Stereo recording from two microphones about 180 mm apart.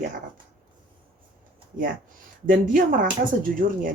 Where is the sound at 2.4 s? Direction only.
45° right (ahead or behind).